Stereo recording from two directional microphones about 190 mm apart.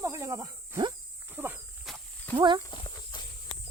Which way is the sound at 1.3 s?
10° right (ahead or behind).